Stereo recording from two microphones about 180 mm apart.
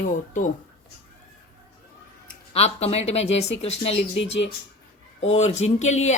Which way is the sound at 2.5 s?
35° left (ahead or behind).